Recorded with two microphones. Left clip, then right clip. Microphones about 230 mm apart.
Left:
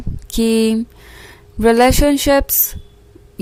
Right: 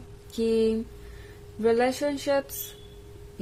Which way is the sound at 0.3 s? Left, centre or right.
Left.